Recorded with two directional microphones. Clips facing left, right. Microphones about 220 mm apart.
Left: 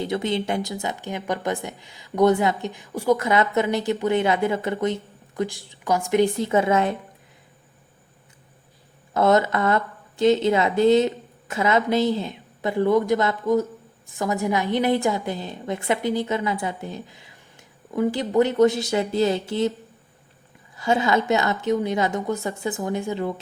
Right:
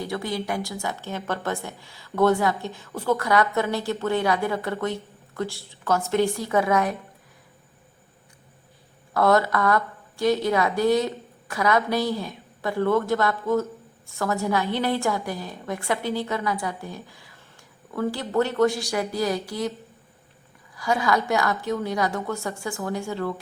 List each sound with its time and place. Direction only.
0.0 s a woman's voice: 20° left (ahead or behind)
9.1 s a woman's voice: 20° left (ahead or behind)
20.7 s a woman's voice: 25° left (ahead or behind)